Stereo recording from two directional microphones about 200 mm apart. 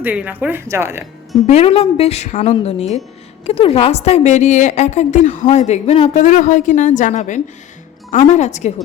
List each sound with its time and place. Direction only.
0.0 s speech: 10° right (ahead or behind)
1.5 s a woman's voice: 30° left (ahead or behind)